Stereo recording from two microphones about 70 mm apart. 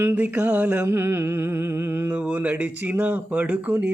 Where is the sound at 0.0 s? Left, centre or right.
Right.